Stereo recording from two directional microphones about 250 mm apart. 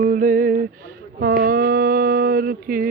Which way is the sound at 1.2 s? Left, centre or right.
Right.